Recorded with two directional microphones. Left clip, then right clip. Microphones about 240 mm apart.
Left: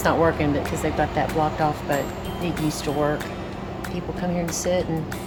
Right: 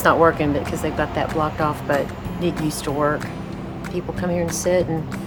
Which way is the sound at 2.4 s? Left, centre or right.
Centre.